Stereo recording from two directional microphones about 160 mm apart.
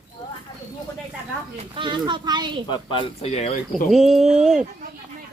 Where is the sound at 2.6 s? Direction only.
30° left (ahead or behind).